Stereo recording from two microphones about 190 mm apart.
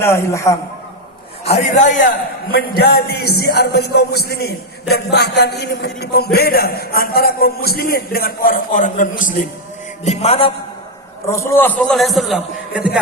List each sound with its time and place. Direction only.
0.0 s a man's voice: 15° left (ahead or behind)
1.5 s a man's voice: 35° left (ahead or behind)
10.0 s a sound: 35° left (ahead or behind)
11.3 s a man's voice: 15° left (ahead or behind); by 13.0 s 5° right (ahead or behind)